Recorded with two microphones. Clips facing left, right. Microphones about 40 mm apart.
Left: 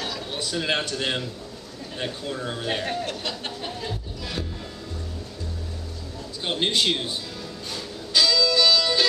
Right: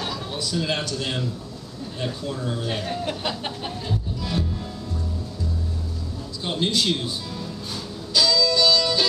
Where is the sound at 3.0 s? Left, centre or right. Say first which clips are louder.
Right 3 dB; centre.